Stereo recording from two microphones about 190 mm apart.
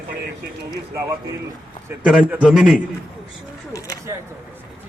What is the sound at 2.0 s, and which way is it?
Speech, 5° right (ahead or behind).